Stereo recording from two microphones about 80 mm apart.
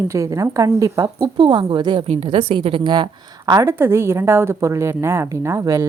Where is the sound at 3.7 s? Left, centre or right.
Right.